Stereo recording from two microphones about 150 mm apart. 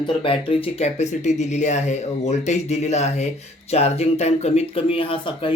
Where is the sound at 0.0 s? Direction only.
35° left (ahead or behind).